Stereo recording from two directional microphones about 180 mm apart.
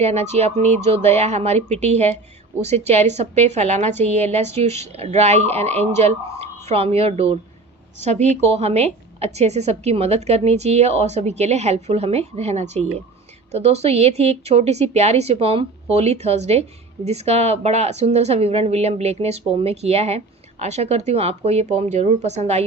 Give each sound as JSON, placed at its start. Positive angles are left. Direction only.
{"t": 0.0, "sound": "a woman's voice", "side_deg": -35}